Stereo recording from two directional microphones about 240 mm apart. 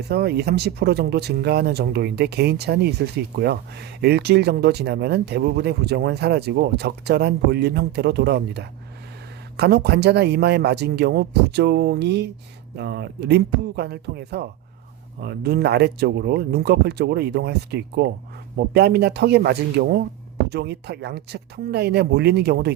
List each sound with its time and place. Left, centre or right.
0.1 s speech: right